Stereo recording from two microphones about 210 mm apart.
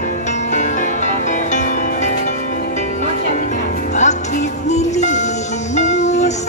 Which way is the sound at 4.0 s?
35° left (ahead or behind).